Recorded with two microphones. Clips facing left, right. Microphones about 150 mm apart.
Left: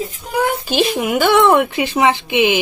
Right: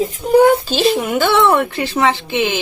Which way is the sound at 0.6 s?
15° left (ahead or behind).